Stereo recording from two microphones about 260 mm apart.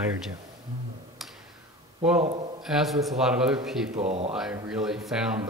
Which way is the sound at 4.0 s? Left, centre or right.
Right.